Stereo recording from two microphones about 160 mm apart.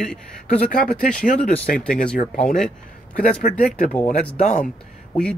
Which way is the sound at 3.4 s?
55° left (ahead or behind).